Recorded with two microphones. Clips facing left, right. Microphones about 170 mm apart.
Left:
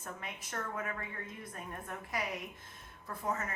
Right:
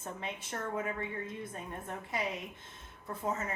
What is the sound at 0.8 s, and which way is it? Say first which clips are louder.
Speech: right 4 dB; 25° right (ahead or behind).